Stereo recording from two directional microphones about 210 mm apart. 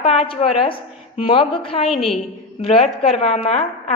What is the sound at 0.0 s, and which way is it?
A woman's voice, 30° left (ahead or behind).